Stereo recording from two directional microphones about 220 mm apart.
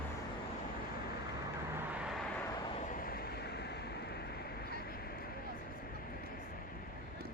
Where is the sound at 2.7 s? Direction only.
40° left (ahead or behind).